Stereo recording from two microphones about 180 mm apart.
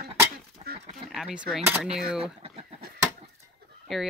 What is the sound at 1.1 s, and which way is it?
Speech, 5° right (ahead or behind).